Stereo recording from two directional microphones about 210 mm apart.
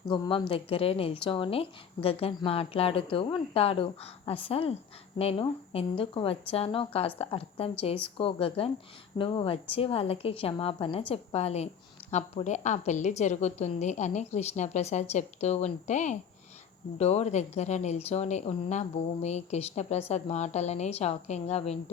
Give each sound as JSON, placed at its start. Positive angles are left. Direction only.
{"t": 0.1, "sound": "speech", "side_deg": 25}